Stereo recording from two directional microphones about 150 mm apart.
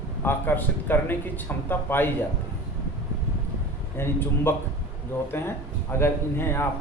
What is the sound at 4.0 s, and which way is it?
Speech, 15° left (ahead or behind).